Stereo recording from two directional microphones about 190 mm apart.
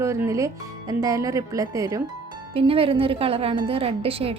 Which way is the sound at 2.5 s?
30° right (ahead or behind).